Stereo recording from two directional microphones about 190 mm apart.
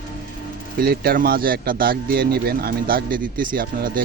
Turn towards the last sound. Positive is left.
turn(degrees=-50)  # may be behind; listen again after turning